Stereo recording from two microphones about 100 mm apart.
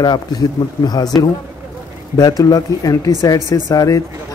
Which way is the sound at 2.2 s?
40° left (ahead or behind).